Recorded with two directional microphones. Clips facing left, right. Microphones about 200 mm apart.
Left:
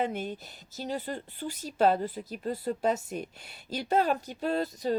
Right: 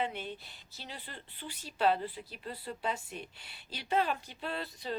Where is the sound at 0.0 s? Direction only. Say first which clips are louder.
Left 5 dB; 45° left (ahead or behind).